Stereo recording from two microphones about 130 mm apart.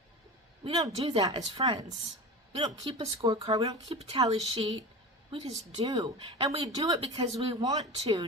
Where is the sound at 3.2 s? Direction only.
35° right (ahead or behind).